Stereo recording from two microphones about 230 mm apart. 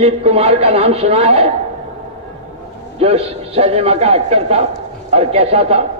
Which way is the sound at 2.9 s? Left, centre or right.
Right.